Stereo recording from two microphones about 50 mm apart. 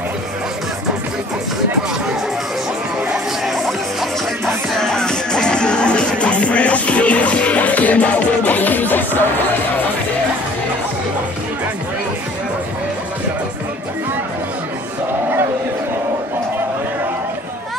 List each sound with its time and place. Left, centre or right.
3.4 s music: centre; by 9.8 s left